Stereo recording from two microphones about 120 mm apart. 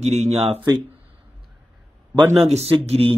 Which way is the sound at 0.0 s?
65° right (ahead or behind).